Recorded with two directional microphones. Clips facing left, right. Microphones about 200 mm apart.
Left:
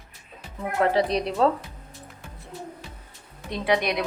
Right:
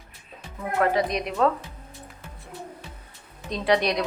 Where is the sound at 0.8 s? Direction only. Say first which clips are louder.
Left 1 dB; 30° left (ahead or behind).